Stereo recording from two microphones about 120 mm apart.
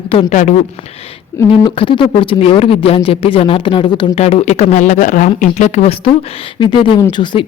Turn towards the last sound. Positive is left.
turn(degrees=40)  # may be behind; listen again after turning